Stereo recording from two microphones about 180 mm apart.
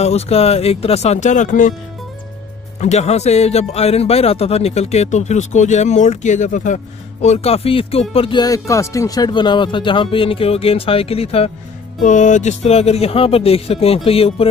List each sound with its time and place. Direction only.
0.0 s a man's voice: 35° left (ahead or behind)
2.8 s a man's voice: 40° left (ahead or behind)